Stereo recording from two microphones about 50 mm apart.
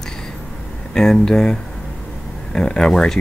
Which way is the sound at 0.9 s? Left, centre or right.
Centre.